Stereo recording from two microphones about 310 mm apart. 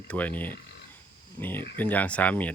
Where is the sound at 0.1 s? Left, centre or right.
Centre.